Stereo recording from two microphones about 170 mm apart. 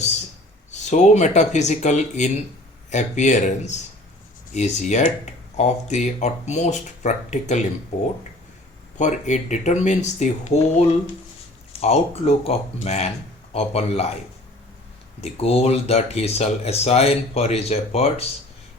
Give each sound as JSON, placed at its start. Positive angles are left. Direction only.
{"t": 0.9, "sound": "speech", "side_deg": 45}
{"t": 15.2, "sound": "speech", "side_deg": 35}